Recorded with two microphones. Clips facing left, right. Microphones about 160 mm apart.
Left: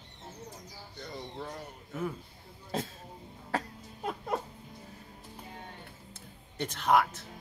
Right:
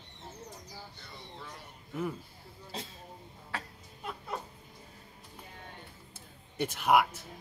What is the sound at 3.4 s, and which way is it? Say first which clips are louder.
Music: left 8 dB; 40° left (ahead or behind).